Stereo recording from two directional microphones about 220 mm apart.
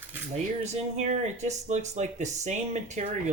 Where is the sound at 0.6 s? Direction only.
30° right (ahead or behind).